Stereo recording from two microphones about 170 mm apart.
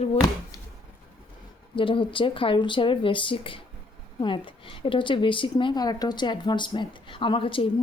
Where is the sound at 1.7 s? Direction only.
30° left (ahead or behind).